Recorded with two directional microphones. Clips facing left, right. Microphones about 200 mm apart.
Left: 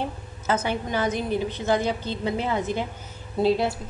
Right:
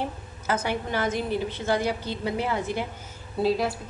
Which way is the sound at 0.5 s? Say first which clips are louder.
Left 2 dB; 20° left (ahead or behind).